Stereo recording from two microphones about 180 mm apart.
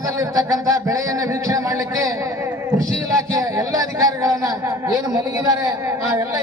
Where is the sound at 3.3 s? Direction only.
20° right (ahead or behind).